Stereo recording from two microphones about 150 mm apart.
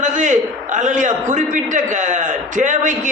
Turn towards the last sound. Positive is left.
turn(degrees=-60)  # may be behind; listen again after turning